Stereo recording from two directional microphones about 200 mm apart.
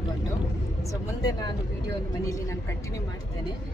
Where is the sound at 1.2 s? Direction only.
20° left (ahead or behind).